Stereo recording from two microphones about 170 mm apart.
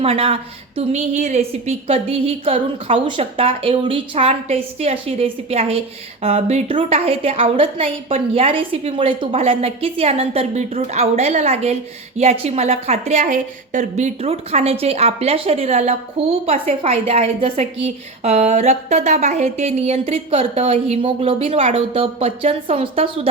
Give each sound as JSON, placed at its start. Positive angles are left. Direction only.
{"t": 0.0, "sound": "a woman's voice", "side_deg": -35}